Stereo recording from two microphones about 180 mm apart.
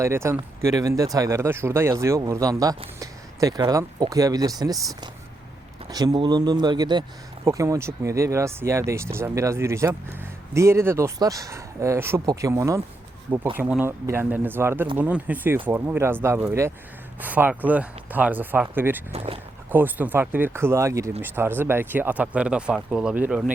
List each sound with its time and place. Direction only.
0.0 s speech: 15° right (ahead or behind)
5.9 s speech: 20° right (ahead or behind)
19.1 s speech: 35° right (ahead or behind)
19.7 s speech: 10° right (ahead or behind)